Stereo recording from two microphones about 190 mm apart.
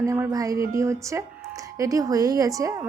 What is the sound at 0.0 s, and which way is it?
A woman's voice, 15° right (ahead or behind).